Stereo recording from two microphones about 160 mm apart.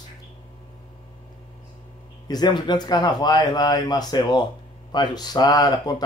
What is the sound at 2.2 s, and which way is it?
Speech, 25° left (ahead or behind).